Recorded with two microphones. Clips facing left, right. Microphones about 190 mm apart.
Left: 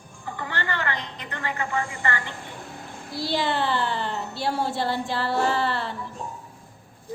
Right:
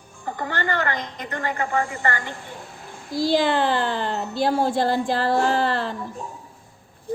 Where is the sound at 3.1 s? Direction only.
45° right (ahead or behind).